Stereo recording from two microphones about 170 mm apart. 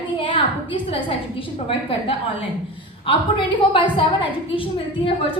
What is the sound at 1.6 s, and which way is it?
A woman's voice, 30° left (ahead or behind).